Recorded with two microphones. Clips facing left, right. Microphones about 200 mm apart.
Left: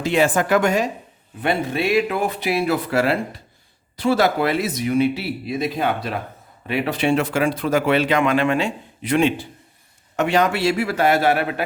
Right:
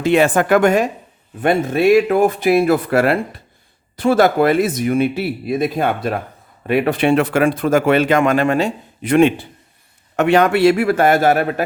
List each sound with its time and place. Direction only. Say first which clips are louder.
0.0 s a woman's voice: right 4 dB; 60° right (ahead or behind)